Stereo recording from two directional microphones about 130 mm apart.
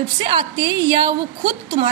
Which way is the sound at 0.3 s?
30° right (ahead or behind).